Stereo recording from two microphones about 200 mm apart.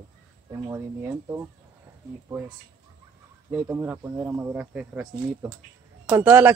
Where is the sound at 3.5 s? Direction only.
10° right (ahead or behind).